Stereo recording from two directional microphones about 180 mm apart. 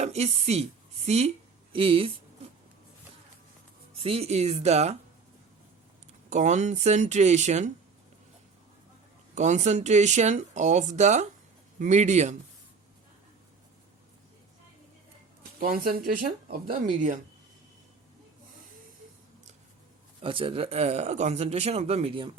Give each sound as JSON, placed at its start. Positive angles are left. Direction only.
{"t": 0.0, "sound": "a woman's voice", "side_deg": -35}
{"t": 3.9, "sound": "speech", "side_deg": -30}
{"t": 6.3, "sound": "speech", "side_deg": -40}
{"t": 9.3, "sound": "speech", "side_deg": -40}
{"t": 15.6, "sound": "speech", "side_deg": -50}
{"t": 20.2, "sound": "speech", "side_deg": -30}